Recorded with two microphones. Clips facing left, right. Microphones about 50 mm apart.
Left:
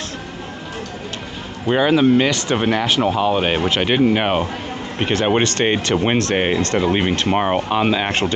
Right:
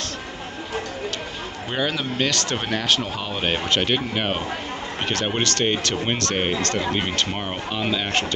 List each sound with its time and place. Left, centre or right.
1.7 s speech: centre